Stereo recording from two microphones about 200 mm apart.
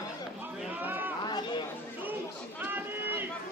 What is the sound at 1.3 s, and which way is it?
Chatter, 20° left (ahead or behind).